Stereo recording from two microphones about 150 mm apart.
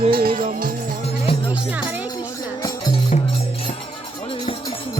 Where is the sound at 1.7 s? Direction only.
10° right (ahead or behind).